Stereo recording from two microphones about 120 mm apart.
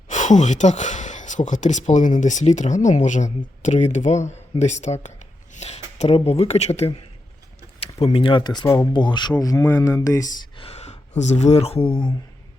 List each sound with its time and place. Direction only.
0.1 s speech: 90° left; by 7.0 s 60° left (ahead or behind)
8.0 s speech: 50° left (ahead or behind); by 8.9 s 30° left (ahead or behind)
8.9 s speech: 40° left (ahead or behind)
10.6 s a sound: 60° left (ahead or behind)
11.2 s speech: 70° left (ahead or behind); by 12.1 s 45° left (ahead or behind)